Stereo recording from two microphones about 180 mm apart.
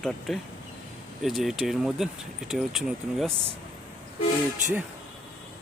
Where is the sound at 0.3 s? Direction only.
Centre (ahead or behind).